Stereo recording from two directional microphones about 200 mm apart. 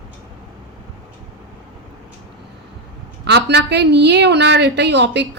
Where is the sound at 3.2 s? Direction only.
60° right (ahead or behind).